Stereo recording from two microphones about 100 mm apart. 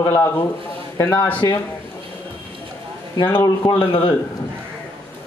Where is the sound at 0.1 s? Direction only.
20° left (ahead or behind).